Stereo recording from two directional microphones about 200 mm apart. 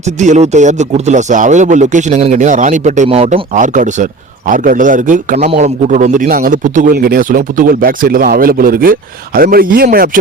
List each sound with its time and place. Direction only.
0.2 s a man's voice: 35° right (ahead or behind)